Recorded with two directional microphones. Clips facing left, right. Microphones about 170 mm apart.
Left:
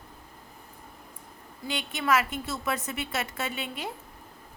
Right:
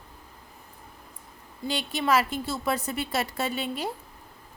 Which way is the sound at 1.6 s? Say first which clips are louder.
Right 3 dB; 35° right (ahead or behind).